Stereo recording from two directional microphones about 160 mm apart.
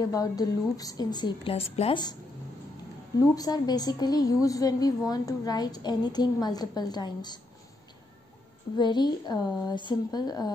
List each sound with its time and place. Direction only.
0.0 s a woman's voice: 25° left (ahead or behind)
3.3 s a woman's voice: 25° left (ahead or behind)
8.7 s a woman's voice: 25° left (ahead or behind)